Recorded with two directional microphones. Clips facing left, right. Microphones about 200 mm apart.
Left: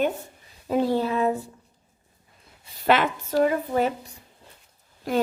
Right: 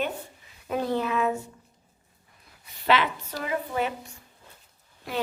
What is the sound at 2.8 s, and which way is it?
A woman's voice, 45° left (ahead or behind).